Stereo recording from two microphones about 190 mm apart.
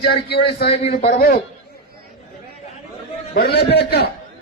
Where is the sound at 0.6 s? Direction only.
30° left (ahead or behind).